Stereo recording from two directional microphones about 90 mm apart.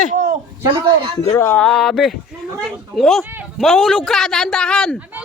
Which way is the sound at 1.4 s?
15° left (ahead or behind).